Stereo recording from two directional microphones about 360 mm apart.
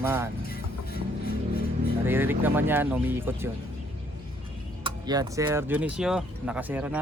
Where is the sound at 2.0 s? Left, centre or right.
Centre.